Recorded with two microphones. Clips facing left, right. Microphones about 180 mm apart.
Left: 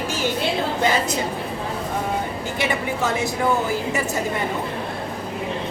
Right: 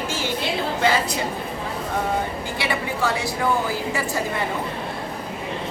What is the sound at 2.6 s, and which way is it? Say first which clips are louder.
Speech: left 1 dB; 20° left (ahead or behind).